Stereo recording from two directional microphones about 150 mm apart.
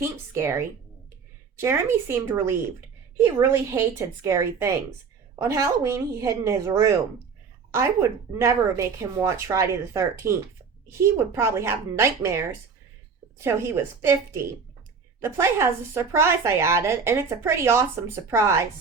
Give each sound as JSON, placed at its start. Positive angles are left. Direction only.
{"t": 0.0, "sound": "a woman's voice", "side_deg": -15}
{"t": 8.4, "sound": "a woman's voice", "side_deg": -20}